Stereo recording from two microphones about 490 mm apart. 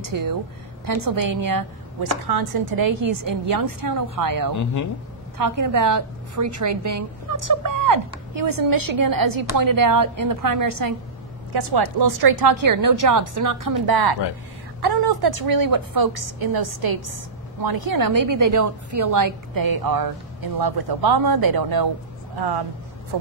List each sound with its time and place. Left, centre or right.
0.0 s a woman's voice: right